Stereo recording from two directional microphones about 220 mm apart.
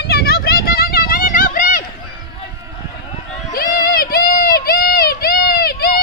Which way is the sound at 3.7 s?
40° left (ahead or behind).